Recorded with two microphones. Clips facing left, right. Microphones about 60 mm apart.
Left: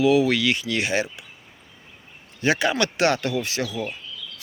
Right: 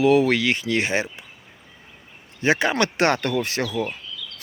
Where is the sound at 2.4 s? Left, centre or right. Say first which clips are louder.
Right 1 dB; right.